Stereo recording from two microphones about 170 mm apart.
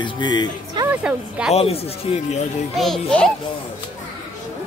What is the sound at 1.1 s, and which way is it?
Speech, 5° right (ahead or behind).